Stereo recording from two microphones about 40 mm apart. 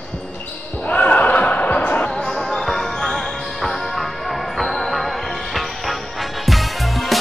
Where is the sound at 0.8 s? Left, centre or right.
Left.